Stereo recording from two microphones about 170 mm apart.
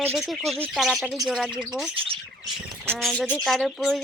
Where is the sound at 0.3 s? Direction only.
Centre (ahead or behind).